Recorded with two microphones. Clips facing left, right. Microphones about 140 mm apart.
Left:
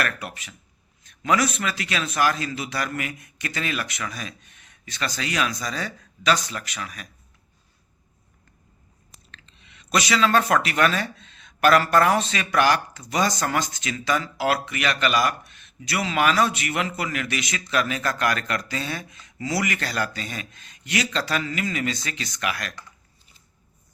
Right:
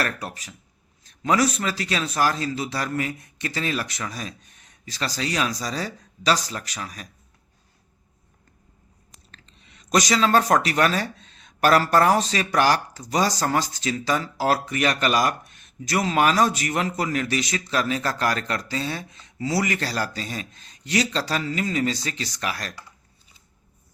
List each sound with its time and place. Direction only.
0.0 s a man's voice: 35° right (ahead or behind)
9.3 s a man's voice: 40° right (ahead or behind)